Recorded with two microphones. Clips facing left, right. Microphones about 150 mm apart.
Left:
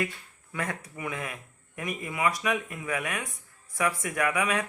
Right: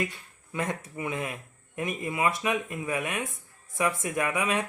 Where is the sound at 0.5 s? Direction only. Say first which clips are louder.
Right 3 dB; 20° right (ahead or behind).